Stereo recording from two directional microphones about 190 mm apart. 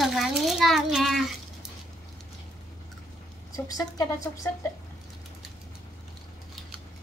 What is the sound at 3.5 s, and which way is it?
Speech, 20° left (ahead or behind).